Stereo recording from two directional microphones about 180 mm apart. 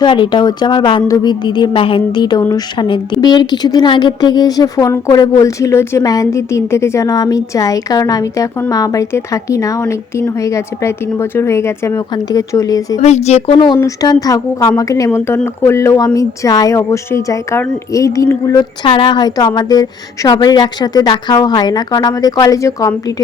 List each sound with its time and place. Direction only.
0.0 s a woman's voice: 25° left (ahead or behind)
13.0 s speech: 40° left (ahead or behind); by 23.2 s 20° left (ahead or behind)